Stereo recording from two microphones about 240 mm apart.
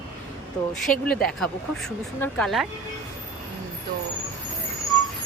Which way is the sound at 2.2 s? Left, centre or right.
Centre.